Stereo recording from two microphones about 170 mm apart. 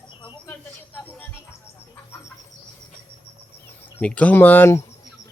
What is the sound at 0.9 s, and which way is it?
Speech, 10° left (ahead or behind).